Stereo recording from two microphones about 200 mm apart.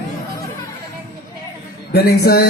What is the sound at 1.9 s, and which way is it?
Speech, 55° left (ahead or behind).